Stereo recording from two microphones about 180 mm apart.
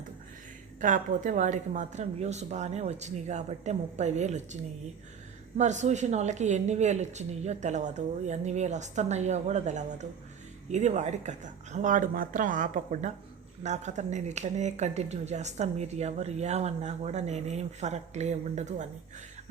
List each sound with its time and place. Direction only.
0.8 s speech: 45° right (ahead or behind)
5.5 s speech: 40° right (ahead or behind)